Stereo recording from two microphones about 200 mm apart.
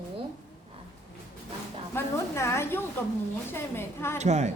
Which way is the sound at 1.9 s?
15° left (ahead or behind).